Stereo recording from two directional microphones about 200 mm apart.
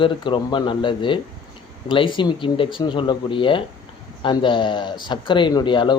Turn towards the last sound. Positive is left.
turn(degrees=25)  # may be behind; listen again after turning